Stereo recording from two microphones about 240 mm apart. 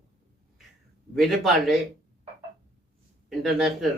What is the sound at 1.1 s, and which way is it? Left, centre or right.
Speech, centre.